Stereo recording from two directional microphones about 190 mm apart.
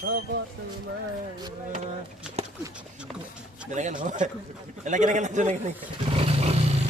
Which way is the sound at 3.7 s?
40° right (ahead or behind).